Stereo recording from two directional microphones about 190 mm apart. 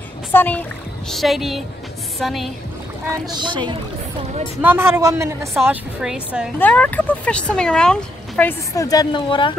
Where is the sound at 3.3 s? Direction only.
25° right (ahead or behind).